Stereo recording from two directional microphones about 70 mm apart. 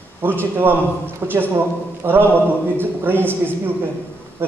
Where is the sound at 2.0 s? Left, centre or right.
Right.